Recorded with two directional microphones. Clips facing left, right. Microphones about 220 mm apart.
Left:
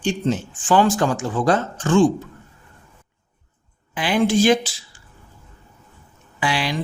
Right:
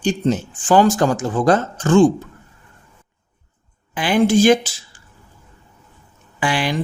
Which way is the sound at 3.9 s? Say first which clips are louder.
Right 3 dB; 45° right (ahead or behind).